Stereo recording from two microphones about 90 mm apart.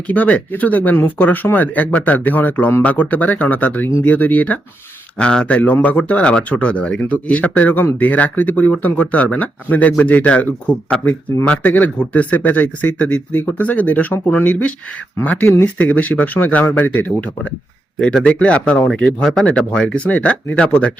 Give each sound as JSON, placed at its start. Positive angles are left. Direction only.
{"t": 0.1, "sound": "speech", "side_deg": 15}